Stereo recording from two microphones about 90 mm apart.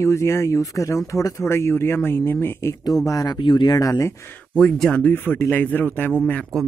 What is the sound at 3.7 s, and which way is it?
Speech, 40° left (ahead or behind).